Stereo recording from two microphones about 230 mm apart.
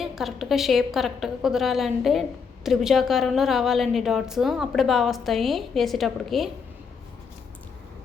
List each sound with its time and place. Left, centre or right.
0.0 s a woman's voice: centre